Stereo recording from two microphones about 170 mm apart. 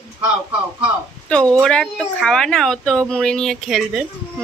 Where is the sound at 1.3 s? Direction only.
5° left (ahead or behind).